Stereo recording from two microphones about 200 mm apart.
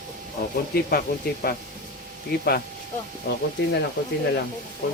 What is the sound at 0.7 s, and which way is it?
Speech, 50° left (ahead or behind).